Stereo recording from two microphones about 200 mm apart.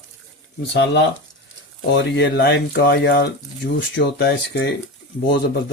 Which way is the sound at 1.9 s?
60° left (ahead or behind).